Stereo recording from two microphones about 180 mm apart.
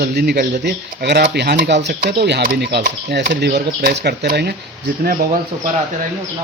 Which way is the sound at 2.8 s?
55° right (ahead or behind).